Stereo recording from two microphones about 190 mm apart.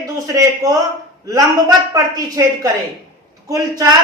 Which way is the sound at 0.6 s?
20° right (ahead or behind).